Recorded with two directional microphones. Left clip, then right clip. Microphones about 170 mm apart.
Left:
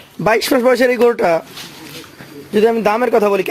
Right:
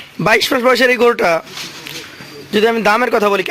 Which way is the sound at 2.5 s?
5° left (ahead or behind).